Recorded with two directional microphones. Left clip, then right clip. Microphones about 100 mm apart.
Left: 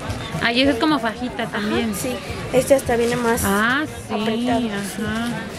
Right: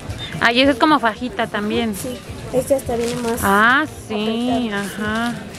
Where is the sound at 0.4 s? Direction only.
25° right (ahead or behind).